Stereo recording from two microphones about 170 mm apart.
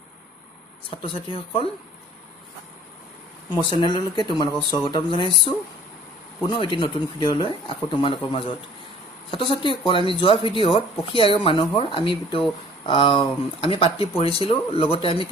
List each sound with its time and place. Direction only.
0.8 s speech: 30° left (ahead or behind)
3.6 s speech: 25° left (ahead or behind)
6.4 s speech: 30° left (ahead or behind)